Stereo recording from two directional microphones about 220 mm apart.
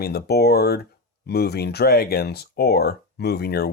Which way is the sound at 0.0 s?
45° left (ahead or behind).